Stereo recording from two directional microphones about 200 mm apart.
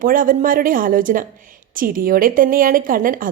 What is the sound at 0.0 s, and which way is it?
A woman's voice, 45° right (ahead or behind).